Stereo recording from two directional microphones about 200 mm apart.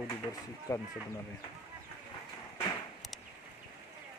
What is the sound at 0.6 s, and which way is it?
Speech, 15° left (ahead or behind).